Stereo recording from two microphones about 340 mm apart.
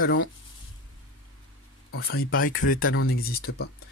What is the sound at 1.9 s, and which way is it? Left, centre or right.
Speech, left.